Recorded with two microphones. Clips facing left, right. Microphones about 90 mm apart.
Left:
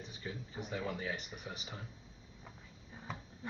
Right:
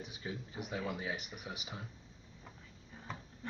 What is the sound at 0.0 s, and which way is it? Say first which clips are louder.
Speech: right 1 dB; 10° right (ahead or behind).